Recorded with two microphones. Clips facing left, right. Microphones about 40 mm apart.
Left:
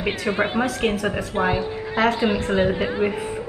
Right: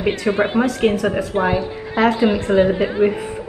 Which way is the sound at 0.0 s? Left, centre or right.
Centre.